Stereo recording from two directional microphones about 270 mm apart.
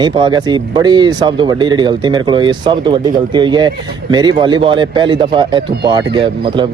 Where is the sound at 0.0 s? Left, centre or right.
Centre.